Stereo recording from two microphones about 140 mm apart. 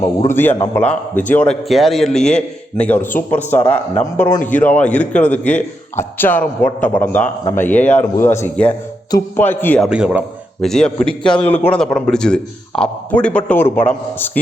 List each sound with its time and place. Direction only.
0.3 s a man's voice: 15° left (ahead or behind)
1.6 s a man's voice: centre (ahead or behind)
9.8 s speech: 5° right (ahead or behind)
10.6 s a man's voice: 5° left (ahead or behind)